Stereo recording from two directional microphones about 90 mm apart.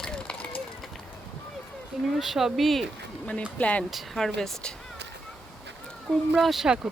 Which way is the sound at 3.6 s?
15° left (ahead or behind).